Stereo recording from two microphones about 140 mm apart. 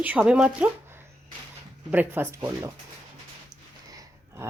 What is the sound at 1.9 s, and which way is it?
Speech, 15° right (ahead or behind).